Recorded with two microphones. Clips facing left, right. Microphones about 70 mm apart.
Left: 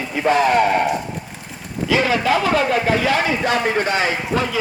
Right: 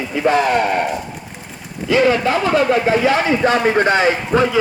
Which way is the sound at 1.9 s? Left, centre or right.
Right.